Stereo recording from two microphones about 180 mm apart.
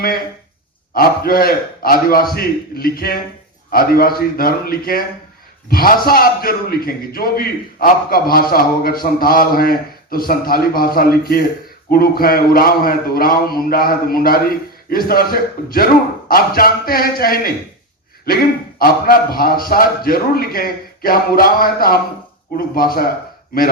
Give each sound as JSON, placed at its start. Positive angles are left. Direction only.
{"t": 0.9, "sound": "a man's voice", "side_deg": 55}
{"t": 18.8, "sound": "a man's voice", "side_deg": 55}